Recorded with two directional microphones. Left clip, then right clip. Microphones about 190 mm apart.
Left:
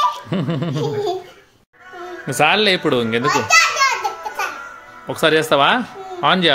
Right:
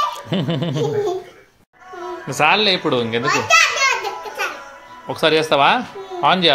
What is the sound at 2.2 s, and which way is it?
A child's voice, 35° left (ahead or behind).